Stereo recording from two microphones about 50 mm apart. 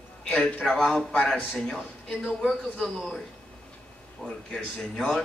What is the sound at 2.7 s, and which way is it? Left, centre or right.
Speech, centre.